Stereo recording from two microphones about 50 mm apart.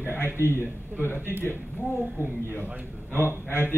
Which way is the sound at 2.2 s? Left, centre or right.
Right.